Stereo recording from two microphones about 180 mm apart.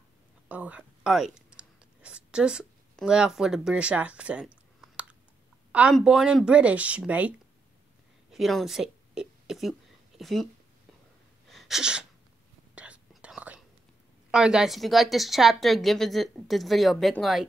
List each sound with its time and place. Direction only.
0.5 s whispering: 10° right (ahead or behind)
5.7 s speech: 5° right (ahead or behind)
8.3 s a sound: centre (ahead or behind)
11.4 s sneeze: centre (ahead or behind)
12.7 s whispering: 5° right (ahead or behind)
14.3 s a woman's voice: 5° right (ahead or behind)